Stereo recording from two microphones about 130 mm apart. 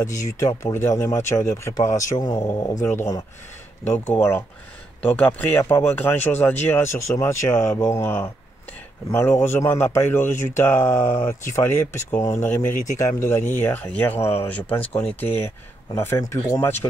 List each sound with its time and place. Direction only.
0.0 s speech: 25° left (ahead or behind)